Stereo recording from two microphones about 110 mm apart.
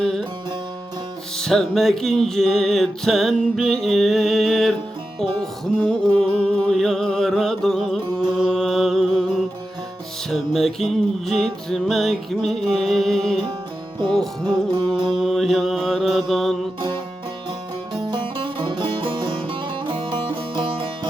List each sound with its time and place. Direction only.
0.0 s music: 5° left (ahead or behind)
1.4 s music: 5° left (ahead or behind)
8.4 s mantra: 5° left (ahead or behind)
10.2 s music: centre (ahead or behind)
15.1 s mantra: centre (ahead or behind)
18.1 s music: 50° right (ahead or behind)